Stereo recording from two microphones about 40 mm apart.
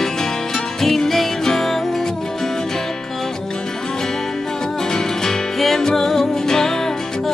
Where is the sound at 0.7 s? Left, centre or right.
Centre.